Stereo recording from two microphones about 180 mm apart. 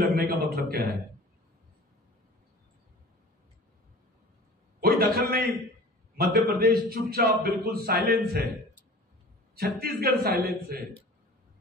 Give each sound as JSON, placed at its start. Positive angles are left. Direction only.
{"t": 0.1, "sound": "a man's voice", "side_deg": -60}
{"t": 4.7, "sound": "a man's voice", "side_deg": -60}
{"t": 9.6, "sound": "a man's voice", "side_deg": -60}